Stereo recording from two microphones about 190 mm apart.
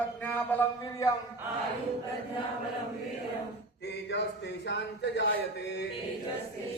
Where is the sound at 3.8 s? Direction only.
65° left (ahead or behind).